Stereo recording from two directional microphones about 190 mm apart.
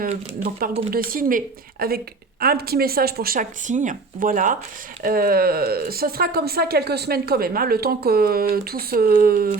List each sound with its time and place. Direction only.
0.9 s speech: 50° right (ahead or behind)